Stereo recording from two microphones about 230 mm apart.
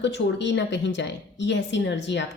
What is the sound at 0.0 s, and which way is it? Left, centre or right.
A woman's voice, left.